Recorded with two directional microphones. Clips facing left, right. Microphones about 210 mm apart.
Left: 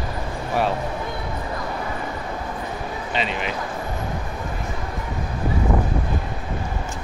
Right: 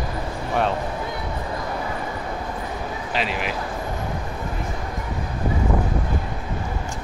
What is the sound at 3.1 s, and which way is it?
Speech, 5° right (ahead or behind).